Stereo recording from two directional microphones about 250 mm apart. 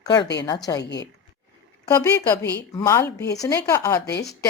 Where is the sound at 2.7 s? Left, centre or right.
Centre.